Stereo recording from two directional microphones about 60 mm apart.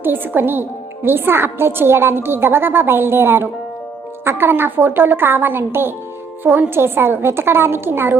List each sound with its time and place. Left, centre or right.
0.0 s a woman's voice: right